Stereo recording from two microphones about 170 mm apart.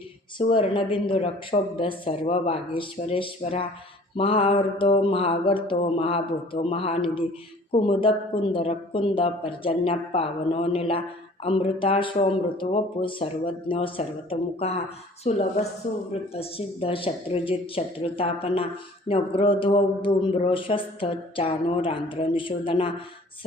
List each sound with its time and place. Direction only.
0.3 s speech: 30° left (ahead or behind)